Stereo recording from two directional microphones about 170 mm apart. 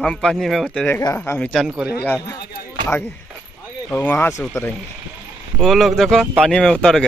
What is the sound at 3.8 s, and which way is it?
Speech, 10° left (ahead or behind).